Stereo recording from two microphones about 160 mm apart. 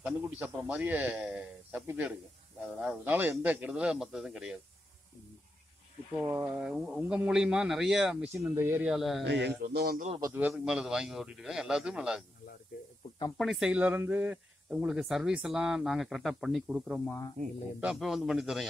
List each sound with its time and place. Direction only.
0.0 s a man's voice: 10° right (ahead or behind)
6.1 s a man's voice: 10° right (ahead or behind)
8.9 s speech: centre (ahead or behind)
9.2 s a man's voice: 90° right
10.5 s speech: 5° right (ahead or behind)
13.4 s speech: 5° right (ahead or behind)
17.0 s speech: 15° left (ahead or behind)
17.7 s speech: 5° right (ahead or behind)